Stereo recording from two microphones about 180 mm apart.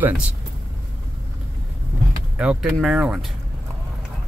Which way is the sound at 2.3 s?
Centre (ahead or behind).